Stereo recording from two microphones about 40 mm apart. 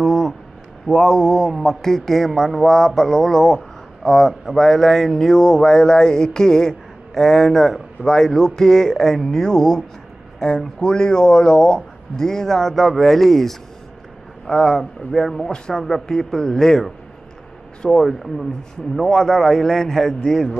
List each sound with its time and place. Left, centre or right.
0.0 s a sound: centre
0.8 s speech: centre
15.5 s speech: centre
17.8 s speech: centre